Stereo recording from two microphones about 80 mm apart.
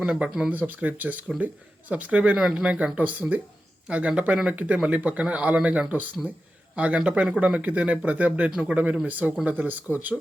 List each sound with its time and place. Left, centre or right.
0.0 s speech: centre